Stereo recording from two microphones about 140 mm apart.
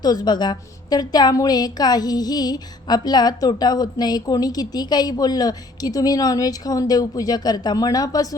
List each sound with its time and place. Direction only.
0.0 s a woman's voice: 30° left (ahead or behind)